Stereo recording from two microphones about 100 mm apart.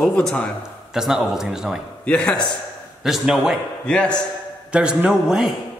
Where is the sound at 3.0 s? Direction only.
5° right (ahead or behind).